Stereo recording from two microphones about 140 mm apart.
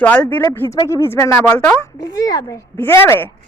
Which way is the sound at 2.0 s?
30° left (ahead or behind).